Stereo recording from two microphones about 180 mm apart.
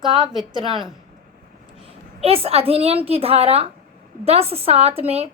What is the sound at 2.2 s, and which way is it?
A woman's voice, 30° right (ahead or behind).